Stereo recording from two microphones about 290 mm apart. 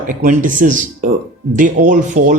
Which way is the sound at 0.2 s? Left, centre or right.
Right.